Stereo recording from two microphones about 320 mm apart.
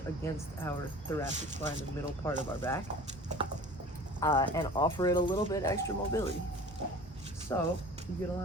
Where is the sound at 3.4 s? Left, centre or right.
Centre.